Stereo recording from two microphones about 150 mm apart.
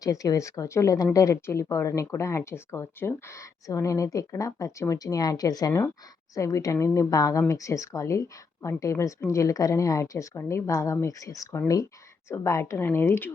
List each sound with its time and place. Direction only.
0.0 s speech: 20° left (ahead or behind)